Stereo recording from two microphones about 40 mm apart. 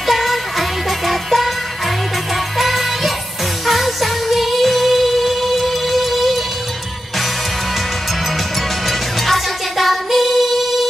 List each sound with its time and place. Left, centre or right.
0.0 s music: centre
8.8 s music: centre